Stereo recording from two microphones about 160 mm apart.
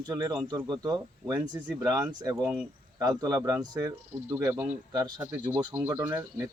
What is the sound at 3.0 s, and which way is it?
Speech, 25° right (ahead or behind).